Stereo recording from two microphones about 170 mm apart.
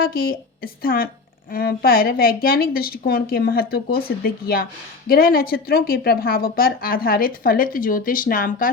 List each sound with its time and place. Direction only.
0.0 s a woman's voice: 60° left (ahead or behind)